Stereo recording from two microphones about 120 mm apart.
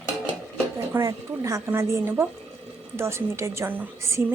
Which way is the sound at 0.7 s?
25° right (ahead or behind).